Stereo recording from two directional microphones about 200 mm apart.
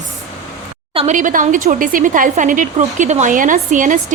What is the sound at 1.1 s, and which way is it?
A woman's voice, 40° right (ahead or behind).